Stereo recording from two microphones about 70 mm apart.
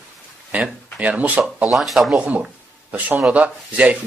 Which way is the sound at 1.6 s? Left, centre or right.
Centre.